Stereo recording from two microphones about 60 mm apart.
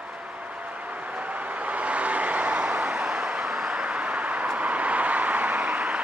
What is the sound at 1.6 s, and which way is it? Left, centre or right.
Vehicle, right.